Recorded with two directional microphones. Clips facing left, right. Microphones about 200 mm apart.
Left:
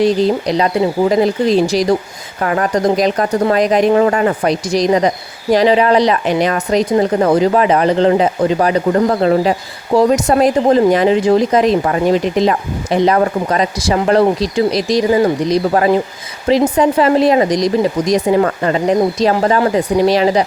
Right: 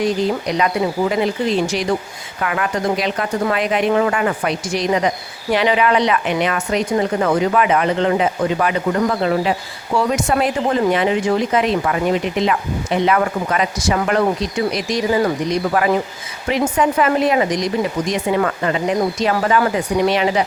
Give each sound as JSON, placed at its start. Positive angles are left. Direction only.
{"t": 0.0, "sound": "speech", "side_deg": 35}